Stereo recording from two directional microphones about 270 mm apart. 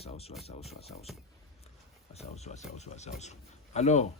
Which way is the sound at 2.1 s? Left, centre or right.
Left.